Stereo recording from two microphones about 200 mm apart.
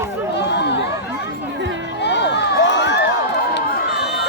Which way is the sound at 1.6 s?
65° right (ahead or behind).